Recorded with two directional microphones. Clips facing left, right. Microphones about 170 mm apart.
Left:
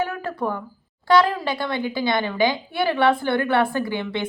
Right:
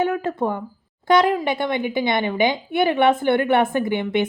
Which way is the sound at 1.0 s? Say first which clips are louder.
Right 1 dB; 20° right (ahead or behind).